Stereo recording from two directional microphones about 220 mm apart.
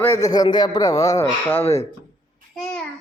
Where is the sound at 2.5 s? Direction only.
5° left (ahead or behind).